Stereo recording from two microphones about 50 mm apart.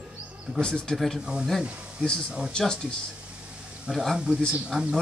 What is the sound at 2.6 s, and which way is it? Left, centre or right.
A man's voice, centre.